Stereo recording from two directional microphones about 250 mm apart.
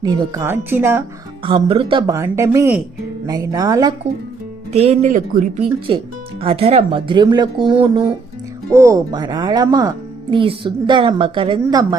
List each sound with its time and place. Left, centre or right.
0.0 s speech: centre
1.5 s speech: right